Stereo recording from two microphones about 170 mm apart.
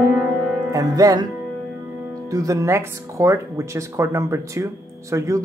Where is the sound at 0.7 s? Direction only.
20° right (ahead or behind).